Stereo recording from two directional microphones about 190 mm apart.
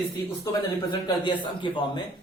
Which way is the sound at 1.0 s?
25° left (ahead or behind).